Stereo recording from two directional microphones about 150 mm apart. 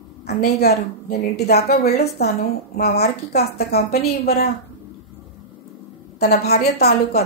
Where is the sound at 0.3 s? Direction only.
90° left.